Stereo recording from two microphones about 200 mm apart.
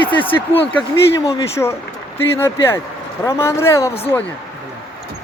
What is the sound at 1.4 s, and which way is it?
Speech, 15° left (ahead or behind).